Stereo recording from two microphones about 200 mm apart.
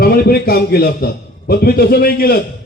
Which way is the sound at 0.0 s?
50° left (ahead or behind).